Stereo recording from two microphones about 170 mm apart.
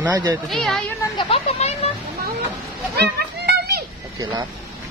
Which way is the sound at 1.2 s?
35° left (ahead or behind).